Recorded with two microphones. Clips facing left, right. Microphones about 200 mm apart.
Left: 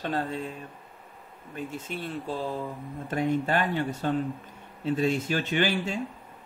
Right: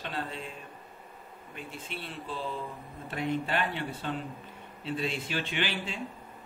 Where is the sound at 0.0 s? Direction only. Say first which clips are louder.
Left 7 dB; 45° left (ahead or behind).